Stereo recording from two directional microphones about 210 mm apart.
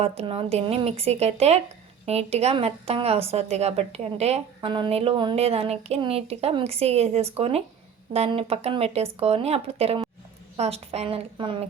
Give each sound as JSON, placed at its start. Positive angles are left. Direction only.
{"t": 0.0, "sound": "a woman's voice", "side_deg": -30}